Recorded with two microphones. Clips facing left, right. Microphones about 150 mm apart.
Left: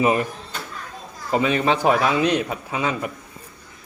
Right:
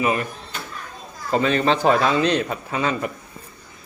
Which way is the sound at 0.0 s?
20° left (ahead or behind).